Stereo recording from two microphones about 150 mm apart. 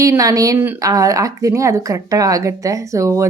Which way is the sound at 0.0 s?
20° right (ahead or behind).